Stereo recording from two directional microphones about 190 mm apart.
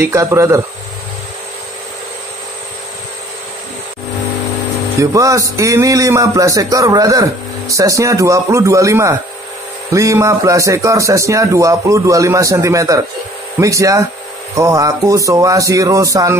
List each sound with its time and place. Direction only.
0.0 s a man's voice: 15° right (ahead or behind)
5.0 s a man's voice: 15° right (ahead or behind)